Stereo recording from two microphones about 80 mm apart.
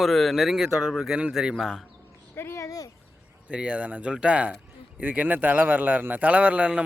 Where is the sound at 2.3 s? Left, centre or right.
Left.